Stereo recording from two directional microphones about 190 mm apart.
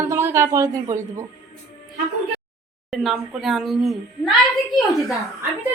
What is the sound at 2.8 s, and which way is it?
A woman's voice, centre (ahead or behind).